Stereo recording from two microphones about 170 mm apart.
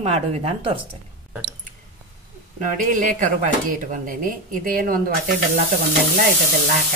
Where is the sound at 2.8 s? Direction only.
50° right (ahead or behind).